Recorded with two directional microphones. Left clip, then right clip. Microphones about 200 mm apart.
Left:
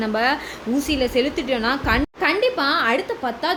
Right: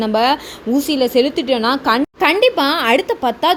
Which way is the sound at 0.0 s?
25° right (ahead or behind).